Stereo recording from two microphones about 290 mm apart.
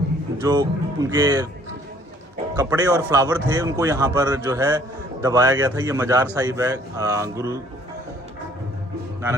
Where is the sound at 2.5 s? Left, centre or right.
Centre.